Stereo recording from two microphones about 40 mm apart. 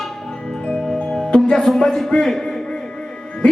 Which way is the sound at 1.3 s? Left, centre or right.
Centre.